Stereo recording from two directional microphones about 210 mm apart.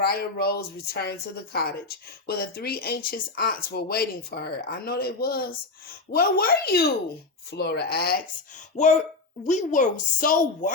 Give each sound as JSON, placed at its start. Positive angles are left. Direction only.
{"t": 0.0, "sound": "speech", "side_deg": 50}
{"t": 2.2, "sound": "speech", "side_deg": 45}
{"t": 8.7, "sound": "a woman's voice", "side_deg": 35}